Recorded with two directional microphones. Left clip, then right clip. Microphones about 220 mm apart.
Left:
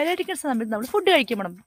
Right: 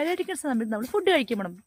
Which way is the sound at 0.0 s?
5° left (ahead or behind).